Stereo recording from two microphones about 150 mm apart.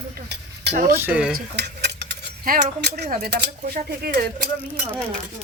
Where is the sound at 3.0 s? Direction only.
75° right (ahead or behind).